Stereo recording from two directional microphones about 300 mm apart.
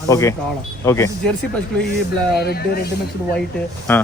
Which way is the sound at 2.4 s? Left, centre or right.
Left.